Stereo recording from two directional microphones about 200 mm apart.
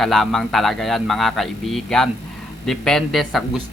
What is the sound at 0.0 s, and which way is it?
A man's voice, centre (ahead or behind).